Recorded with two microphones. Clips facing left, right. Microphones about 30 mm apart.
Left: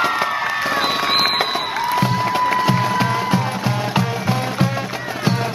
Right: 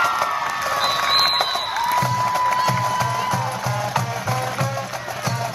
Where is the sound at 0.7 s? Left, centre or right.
Centre.